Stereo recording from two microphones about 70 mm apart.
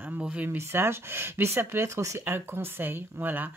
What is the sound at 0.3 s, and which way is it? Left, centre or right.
Speech, right.